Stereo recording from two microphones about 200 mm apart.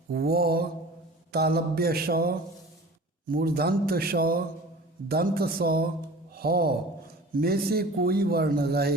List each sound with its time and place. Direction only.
0.1 s a man's voice: 50° right (ahead or behind)